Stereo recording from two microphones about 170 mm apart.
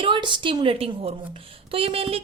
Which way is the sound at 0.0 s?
30° right (ahead or behind).